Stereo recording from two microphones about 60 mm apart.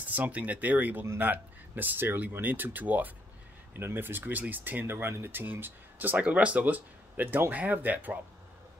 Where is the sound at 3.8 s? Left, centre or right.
Right.